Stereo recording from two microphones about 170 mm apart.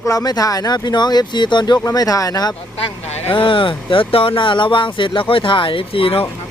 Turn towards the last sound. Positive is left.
turn(degrees=35)  # may be behind; listen again after turning